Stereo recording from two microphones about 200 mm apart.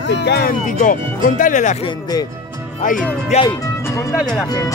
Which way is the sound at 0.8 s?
40° left (ahead or behind).